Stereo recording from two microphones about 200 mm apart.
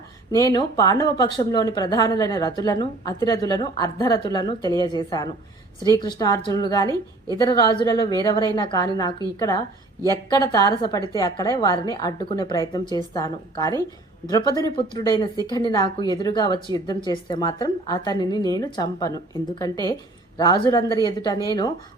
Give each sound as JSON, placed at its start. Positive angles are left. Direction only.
{"t": 0.3, "sound": "speech", "side_deg": 20}